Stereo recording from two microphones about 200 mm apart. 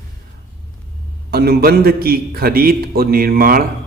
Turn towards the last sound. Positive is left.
turn(degrees=-45)  # may be behind; listen again after turning